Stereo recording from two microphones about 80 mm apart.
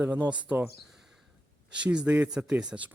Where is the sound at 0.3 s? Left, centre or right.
Centre.